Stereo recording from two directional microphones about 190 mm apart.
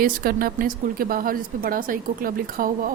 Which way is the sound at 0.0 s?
50° right (ahead or behind).